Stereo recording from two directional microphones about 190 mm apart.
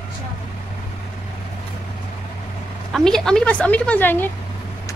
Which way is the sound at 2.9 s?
5° left (ahead or behind).